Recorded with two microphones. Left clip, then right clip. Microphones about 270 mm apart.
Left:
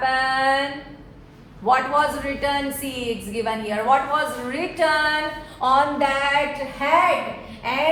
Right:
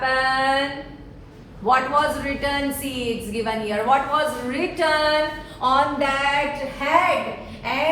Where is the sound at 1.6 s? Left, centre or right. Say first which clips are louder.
Even; left.